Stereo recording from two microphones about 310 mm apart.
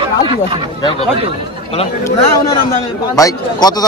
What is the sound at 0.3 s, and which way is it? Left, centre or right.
Speech, centre.